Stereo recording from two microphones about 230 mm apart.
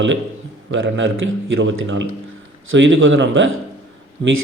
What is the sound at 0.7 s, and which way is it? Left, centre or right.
A man's voice, right.